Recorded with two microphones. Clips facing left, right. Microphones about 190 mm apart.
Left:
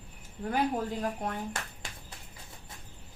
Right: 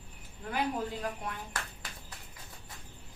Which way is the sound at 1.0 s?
45° left (ahead or behind).